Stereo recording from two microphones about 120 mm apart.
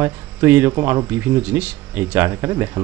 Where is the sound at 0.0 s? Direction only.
20° right (ahead or behind).